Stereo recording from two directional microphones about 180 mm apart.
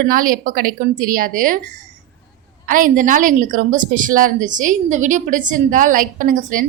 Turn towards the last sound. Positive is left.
turn(degrees=-50)  # may be behind; listen again after turning